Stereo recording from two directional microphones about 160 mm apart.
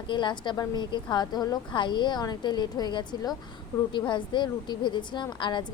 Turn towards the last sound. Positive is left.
turn(degrees=30)  # may be behind; listen again after turning